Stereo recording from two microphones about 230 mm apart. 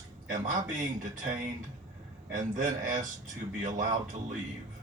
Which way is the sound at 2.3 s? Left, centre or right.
Right.